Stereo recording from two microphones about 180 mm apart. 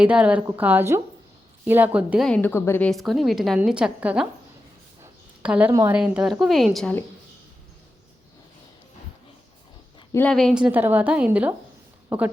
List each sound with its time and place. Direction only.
0.0 s a woman's voice: 5° right (ahead or behind); by 2.9 s 15° left (ahead or behind)
2.9 s a woman's voice: centre (ahead or behind)
5.4 s a woman's voice: 5° right (ahead or behind)
6.0 s a woman's voice: 5° right (ahead or behind)
10.1 s a woman's voice: 10° left (ahead or behind); by 12.3 s 10° right (ahead or behind)